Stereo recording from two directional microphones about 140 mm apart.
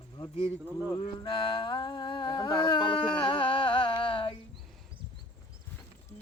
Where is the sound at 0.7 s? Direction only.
15° right (ahead or behind).